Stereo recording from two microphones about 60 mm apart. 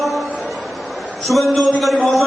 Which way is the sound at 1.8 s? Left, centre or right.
Centre.